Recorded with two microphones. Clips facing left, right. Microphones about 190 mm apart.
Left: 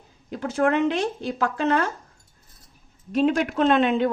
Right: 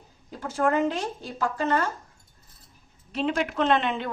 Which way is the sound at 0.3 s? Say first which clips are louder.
Left 3 dB; 70° left (ahead or behind).